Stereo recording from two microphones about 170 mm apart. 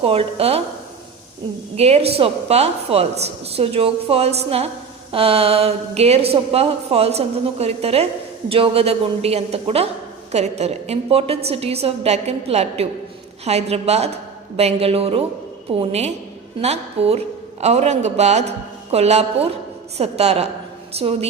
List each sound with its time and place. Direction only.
0.0 s a woman's voice: 35° right (ahead or behind)
1.7 s a woman's voice: 35° right (ahead or behind)